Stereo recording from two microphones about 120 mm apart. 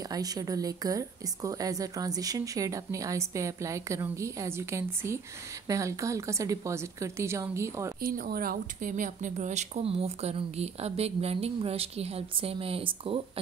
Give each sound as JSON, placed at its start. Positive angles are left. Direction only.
{"t": 0.0, "sound": "a woman's voice", "side_deg": -30}
{"t": 8.8, "sound": "speech", "side_deg": -90}